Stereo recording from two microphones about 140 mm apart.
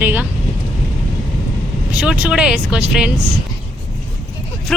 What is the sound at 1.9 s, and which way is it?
Speech, 10° right (ahead or behind).